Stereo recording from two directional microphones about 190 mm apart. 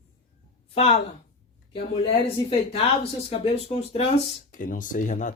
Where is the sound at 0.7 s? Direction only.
30° left (ahead or behind).